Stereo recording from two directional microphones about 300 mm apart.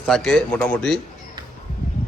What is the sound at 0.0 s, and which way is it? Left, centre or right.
Speech, centre.